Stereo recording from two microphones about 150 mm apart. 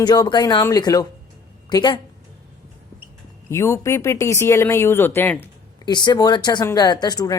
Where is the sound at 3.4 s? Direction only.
15° left (ahead or behind).